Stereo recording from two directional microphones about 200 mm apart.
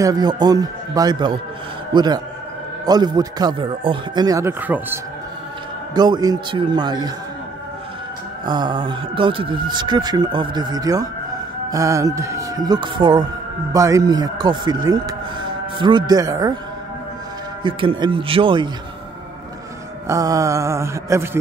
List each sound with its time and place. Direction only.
0.0 s speech: 20° right (ahead or behind)
5.9 s speech: 20° right (ahead or behind)
8.5 s speech: 20° right (ahead or behind)
17.6 s speech: 25° right (ahead or behind)
20.1 s mantra: 15° right (ahead or behind)